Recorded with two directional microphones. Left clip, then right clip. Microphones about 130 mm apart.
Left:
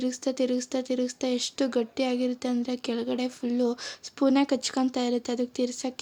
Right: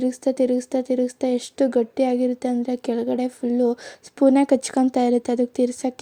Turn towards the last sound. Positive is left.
turn(degrees=-45)  # may be behind; listen again after turning